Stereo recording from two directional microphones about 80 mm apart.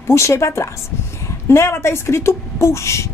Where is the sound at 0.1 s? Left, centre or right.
Left.